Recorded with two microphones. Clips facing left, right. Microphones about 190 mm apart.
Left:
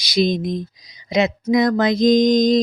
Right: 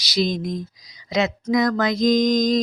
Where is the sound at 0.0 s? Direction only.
20° left (ahead or behind).